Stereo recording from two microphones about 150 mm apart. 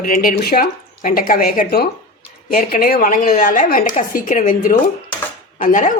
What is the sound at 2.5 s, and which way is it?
A woman's voice, 70° left (ahead or behind).